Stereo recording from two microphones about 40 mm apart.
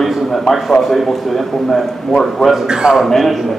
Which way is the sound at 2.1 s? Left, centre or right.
Centre.